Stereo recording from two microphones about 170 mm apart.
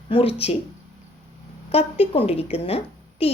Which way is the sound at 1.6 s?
35° left (ahead or behind).